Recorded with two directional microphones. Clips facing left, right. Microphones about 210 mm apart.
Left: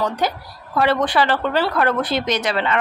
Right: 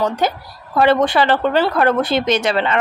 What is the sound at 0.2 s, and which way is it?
A woman's voice, 25° right (ahead or behind).